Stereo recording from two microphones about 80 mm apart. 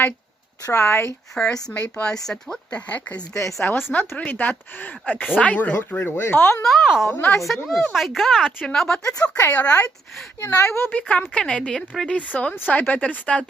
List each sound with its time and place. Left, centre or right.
0.6 s speech: left
1.6 s speech: centre
6.1 s speech: left
6.7 s speech: centre
7.1 s speech: left
7.4 s speech: centre
9.4 s speech: centre
10.4 s speech: left
10.8 s speech: centre
12.0 s speech: centre